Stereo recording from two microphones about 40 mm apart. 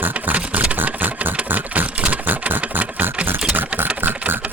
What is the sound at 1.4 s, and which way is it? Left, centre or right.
Sewing machine, right.